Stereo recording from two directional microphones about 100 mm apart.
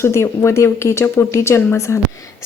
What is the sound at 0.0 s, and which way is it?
Speech, 25° left (ahead or behind).